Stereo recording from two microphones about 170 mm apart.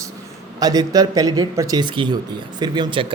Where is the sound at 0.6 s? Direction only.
20° right (ahead or behind).